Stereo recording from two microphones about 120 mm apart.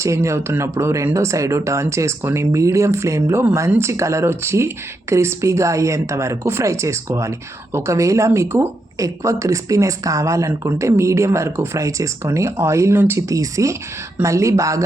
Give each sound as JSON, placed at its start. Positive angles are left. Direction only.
{"t": 0.0, "sound": "speech", "side_deg": -25}